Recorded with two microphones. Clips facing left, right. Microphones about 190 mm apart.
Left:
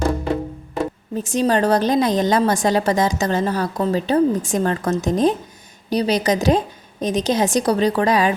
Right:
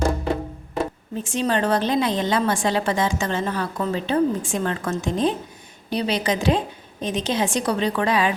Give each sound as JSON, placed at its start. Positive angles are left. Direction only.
{"t": 1.1, "sound": "a woman's voice", "side_deg": 40}